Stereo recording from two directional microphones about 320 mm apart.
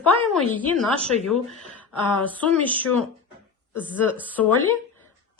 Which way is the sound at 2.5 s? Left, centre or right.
Centre.